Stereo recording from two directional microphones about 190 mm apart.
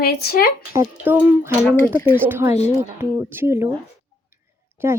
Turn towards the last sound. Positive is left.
turn(degrees=-10)  # may be behind; listen again after turning